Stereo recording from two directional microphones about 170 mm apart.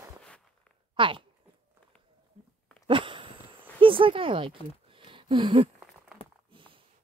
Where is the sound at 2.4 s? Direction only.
40° right (ahead or behind).